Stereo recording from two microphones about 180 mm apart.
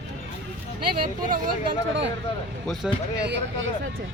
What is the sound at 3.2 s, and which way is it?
Speech, 75° right (ahead or behind).